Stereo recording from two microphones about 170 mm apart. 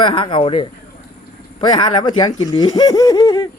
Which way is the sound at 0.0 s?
30° left (ahead or behind).